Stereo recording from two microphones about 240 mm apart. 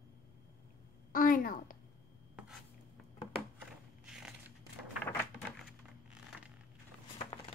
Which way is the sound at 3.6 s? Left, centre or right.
Centre.